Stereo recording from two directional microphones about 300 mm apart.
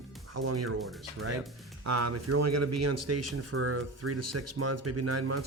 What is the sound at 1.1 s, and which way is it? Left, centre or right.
Speech, right.